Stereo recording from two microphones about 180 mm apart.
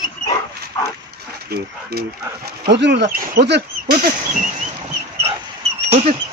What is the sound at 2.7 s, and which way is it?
Speech, 75° right (ahead or behind).